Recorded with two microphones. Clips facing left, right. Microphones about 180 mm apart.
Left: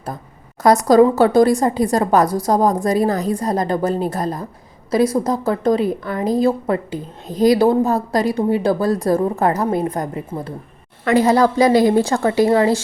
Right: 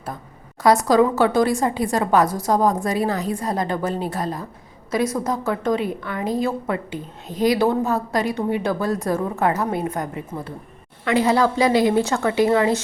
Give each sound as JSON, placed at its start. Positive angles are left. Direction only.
{"t": 0.6, "sound": "a woman's voice", "side_deg": 40}